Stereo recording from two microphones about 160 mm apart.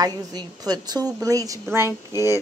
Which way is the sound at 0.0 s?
25° right (ahead or behind).